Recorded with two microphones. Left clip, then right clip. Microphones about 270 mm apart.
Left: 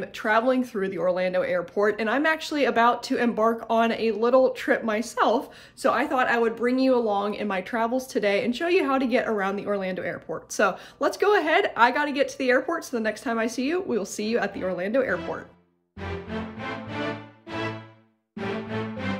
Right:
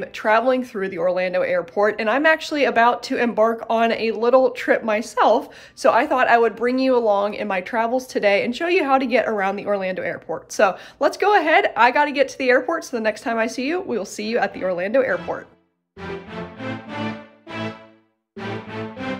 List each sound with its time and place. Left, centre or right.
0.0 s speech: centre